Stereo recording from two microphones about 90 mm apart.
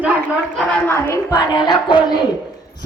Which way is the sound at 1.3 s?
55° left (ahead or behind).